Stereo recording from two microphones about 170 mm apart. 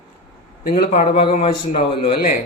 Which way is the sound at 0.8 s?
45° left (ahead or behind).